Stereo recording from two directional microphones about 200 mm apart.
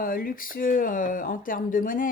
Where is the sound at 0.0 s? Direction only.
45° left (ahead or behind).